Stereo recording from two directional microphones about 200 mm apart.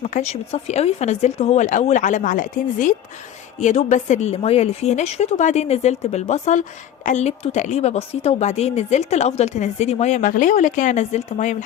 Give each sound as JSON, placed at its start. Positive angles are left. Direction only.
{"t": 0.0, "sound": "speech", "side_deg": 35}